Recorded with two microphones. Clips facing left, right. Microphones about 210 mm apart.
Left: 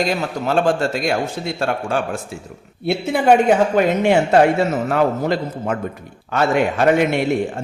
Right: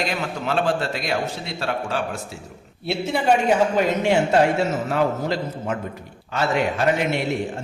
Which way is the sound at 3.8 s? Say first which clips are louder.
Left 4 dB; 55° left (ahead or behind).